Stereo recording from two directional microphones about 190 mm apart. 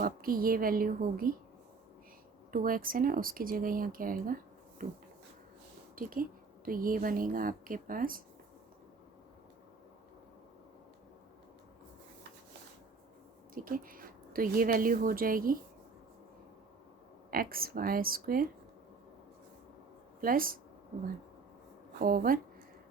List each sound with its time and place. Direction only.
0.0 s speech: 50° right (ahead or behind)
2.5 s speech: 50° right (ahead or behind)
4.8 s a sound: 45° right (ahead or behind)
6.0 s speech: 45° right (ahead or behind)
13.5 s a woman's voice: 45° right (ahead or behind)
17.3 s speech: 50° right (ahead or behind)
20.2 s speech: 50° right (ahead or behind)
21.9 s speech: 50° right (ahead or behind)